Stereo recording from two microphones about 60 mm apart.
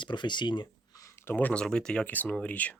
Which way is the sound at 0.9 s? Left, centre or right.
Left.